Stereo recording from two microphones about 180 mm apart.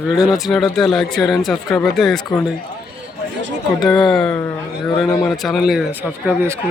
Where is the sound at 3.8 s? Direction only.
Centre (ahead or behind).